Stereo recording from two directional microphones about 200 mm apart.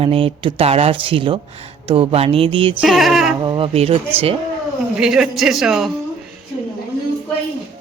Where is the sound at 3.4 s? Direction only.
25° right (ahead or behind).